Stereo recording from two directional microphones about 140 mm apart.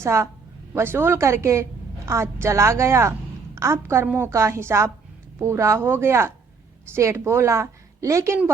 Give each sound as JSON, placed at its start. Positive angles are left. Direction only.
{"t": 0.0, "sound": "a woman's voice", "side_deg": -20}